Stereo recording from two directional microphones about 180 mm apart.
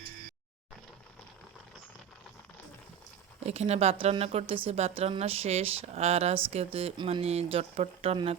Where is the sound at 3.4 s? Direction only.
35° right (ahead or behind).